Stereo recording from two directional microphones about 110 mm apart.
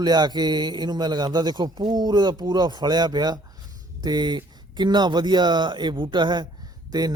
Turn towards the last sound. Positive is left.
turn(degrees=-40)  # may be behind; listen again after turning